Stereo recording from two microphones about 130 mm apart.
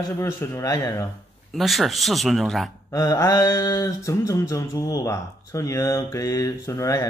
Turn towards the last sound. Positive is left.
turn(degrees=25)  # may be behind; listen again after turning